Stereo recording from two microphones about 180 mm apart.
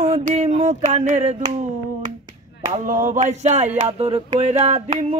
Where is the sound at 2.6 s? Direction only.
45° right (ahead or behind).